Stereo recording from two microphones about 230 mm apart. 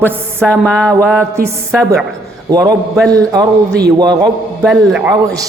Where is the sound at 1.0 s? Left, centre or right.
Centre.